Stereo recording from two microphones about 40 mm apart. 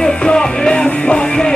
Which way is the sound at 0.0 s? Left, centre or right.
Left.